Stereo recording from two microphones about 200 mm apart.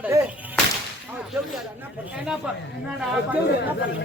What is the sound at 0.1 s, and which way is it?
Whip, 15° right (ahead or behind).